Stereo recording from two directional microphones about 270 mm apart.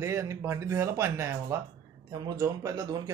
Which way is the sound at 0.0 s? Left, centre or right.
Centre.